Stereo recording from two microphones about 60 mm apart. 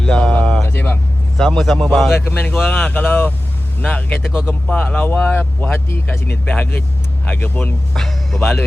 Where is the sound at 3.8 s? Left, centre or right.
Centre.